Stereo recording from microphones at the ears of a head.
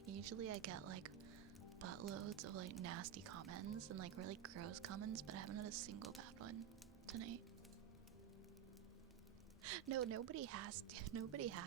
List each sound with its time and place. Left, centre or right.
0.0 s speech: right
9.6 s speech: right